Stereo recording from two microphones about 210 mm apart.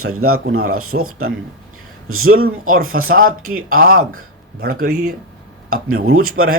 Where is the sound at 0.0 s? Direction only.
90° right.